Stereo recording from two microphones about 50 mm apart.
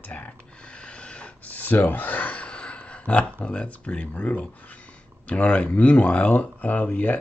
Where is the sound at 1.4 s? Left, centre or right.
Left.